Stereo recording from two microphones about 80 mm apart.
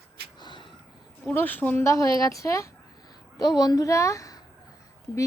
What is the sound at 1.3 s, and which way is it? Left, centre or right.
Speech, left.